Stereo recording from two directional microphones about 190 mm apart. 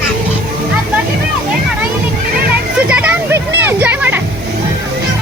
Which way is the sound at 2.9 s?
5° right (ahead or behind).